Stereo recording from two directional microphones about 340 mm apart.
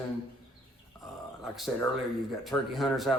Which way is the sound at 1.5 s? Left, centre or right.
Centre.